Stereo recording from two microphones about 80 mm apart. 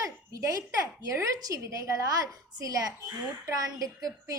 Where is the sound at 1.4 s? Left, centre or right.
Right.